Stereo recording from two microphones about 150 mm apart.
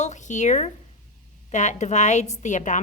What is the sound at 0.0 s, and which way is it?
A woman's voice, 50° left (ahead or behind).